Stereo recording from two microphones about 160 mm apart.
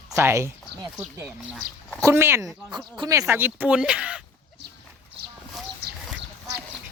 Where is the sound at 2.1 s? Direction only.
15° right (ahead or behind).